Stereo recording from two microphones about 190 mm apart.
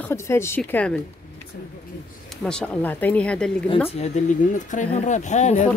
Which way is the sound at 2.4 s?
5° left (ahead or behind).